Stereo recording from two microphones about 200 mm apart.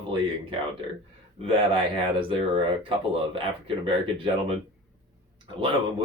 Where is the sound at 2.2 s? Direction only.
25° right (ahead or behind).